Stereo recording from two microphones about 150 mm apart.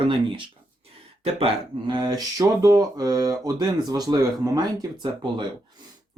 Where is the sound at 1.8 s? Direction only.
30° right (ahead or behind).